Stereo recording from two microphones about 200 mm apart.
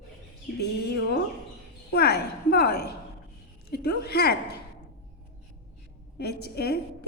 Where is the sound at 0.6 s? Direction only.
55° left (ahead or behind).